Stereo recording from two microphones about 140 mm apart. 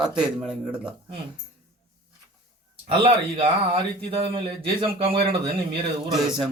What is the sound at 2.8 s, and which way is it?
A man's voice, 40° right (ahead or behind).